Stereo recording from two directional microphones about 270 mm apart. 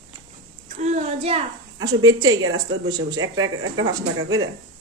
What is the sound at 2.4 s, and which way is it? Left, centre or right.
Speech, right.